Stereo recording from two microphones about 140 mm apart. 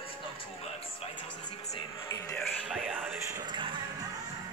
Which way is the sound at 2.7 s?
10° right (ahead or behind).